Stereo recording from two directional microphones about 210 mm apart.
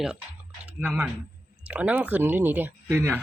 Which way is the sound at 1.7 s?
5° right (ahead or behind).